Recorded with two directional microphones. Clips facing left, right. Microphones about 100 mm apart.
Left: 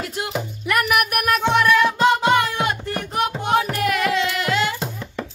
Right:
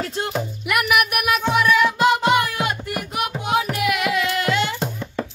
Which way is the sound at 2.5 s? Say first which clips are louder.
Left 1 dB; 20° right (ahead or behind).